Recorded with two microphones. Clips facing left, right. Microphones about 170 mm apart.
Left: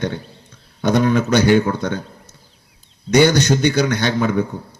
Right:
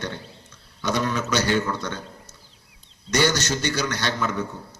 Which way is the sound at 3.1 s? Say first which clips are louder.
Left 9 dB; 55° left (ahead or behind).